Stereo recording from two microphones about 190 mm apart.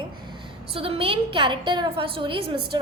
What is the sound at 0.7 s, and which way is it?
A woman's voice, 30° right (ahead or behind).